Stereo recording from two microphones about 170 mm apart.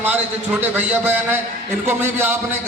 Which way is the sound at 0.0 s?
10° right (ahead or behind).